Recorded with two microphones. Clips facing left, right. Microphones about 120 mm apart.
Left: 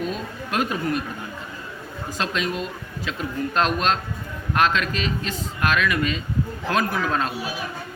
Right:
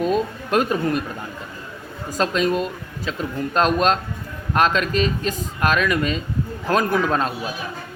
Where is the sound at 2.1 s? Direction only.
40° right (ahead or behind).